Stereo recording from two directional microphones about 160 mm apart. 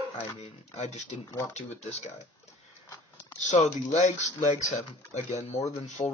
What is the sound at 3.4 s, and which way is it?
Speech, 45° left (ahead or behind).